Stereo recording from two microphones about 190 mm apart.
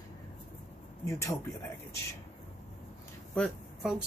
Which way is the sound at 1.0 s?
15° left (ahead or behind).